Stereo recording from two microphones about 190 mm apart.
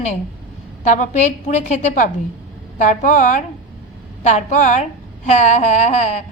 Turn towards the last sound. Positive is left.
turn(degrees=35)  # may be behind; listen again after turning